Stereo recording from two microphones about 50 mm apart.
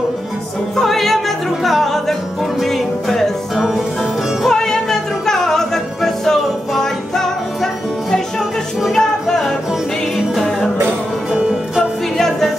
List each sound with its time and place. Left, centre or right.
0.7 s music: centre
10.1 s music: centre
11.3 s music: centre